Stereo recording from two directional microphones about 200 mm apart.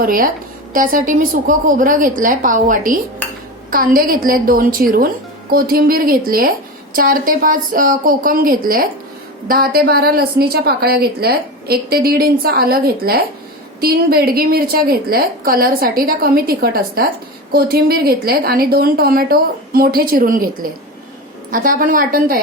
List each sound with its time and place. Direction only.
0.0 s a woman's voice: 45° right (ahead or behind)